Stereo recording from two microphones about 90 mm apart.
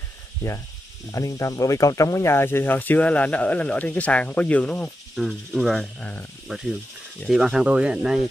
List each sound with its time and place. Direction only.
1.1 s speech: 35° left (ahead or behind); by 4.9 s 15° left (ahead or behind)
5.1 s speech: centre (ahead or behind)
6.4 s speech: 5° right (ahead or behind)